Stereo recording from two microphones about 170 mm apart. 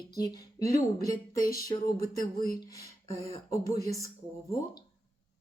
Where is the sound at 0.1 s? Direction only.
20° left (ahead or behind).